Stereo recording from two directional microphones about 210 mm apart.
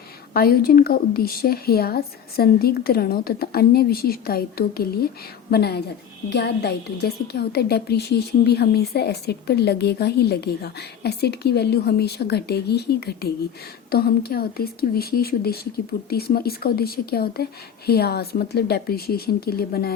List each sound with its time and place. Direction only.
0.3 s a woman's voice: 45° left (ahead or behind)